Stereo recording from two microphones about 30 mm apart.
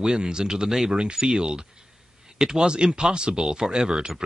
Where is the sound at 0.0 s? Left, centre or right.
Right.